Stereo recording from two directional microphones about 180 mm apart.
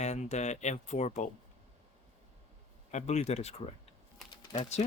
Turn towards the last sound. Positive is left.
turn(degrees=25)  # may be behind; listen again after turning